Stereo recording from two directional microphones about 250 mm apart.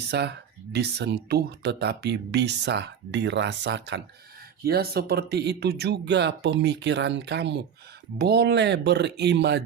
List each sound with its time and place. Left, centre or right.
0.1 s speech: right